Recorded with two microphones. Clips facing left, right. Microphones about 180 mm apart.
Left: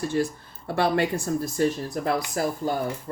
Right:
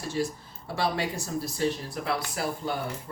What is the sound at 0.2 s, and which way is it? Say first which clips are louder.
Speech: left 4 dB; 55° left (ahead or behind).